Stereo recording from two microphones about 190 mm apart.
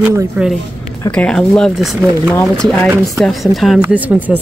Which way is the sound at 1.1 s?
5° left (ahead or behind).